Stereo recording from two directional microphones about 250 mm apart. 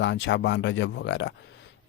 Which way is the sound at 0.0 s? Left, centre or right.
Left.